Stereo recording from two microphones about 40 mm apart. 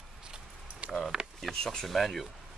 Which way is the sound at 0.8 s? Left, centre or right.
Right.